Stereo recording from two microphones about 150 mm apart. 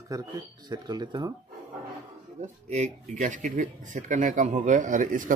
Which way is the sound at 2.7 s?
50° right (ahead or behind).